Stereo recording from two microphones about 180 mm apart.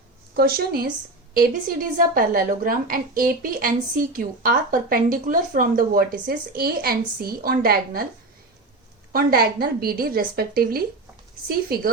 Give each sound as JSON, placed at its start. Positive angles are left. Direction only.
{"t": 0.3, "sound": "a woman's voice", "side_deg": -60}
{"t": 9.1, "sound": "a woman's voice", "side_deg": -55}